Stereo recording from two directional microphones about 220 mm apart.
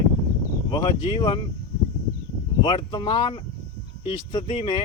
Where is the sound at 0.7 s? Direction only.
20° left (ahead or behind).